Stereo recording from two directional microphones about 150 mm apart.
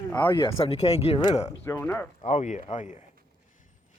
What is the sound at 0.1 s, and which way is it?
Speech, 10° left (ahead or behind).